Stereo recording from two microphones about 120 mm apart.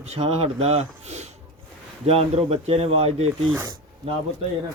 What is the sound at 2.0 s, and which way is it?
Speech, 55° right (ahead or behind).